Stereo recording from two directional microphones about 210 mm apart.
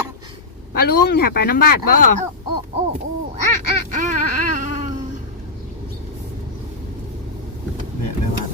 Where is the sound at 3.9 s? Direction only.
35° right (ahead or behind).